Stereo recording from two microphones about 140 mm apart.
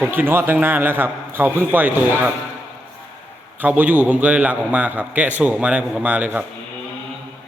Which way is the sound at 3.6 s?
10° right (ahead or behind).